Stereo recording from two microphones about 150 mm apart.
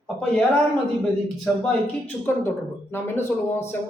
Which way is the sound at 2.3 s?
15° left (ahead or behind).